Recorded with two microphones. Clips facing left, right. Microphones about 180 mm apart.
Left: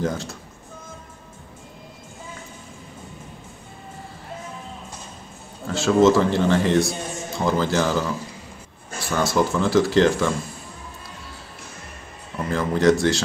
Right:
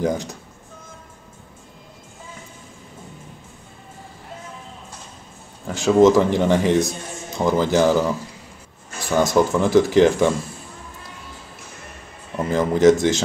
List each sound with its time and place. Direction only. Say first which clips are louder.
0.0 s speech: right 3 dB; 15° right (ahead or behind)
5.7 s speech: right 2 dB; 15° right (ahead or behind)
12.4 s speech: right 4 dB; 20° right (ahead or behind)